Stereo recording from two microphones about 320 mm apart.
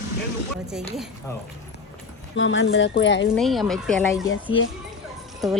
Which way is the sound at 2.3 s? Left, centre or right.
Left.